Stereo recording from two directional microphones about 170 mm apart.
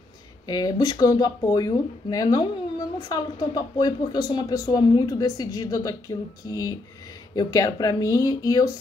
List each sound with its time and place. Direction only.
0.5 s speech: 20° left (ahead or behind)